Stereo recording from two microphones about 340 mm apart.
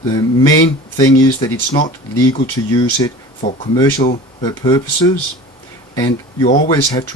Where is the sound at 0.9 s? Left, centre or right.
Centre.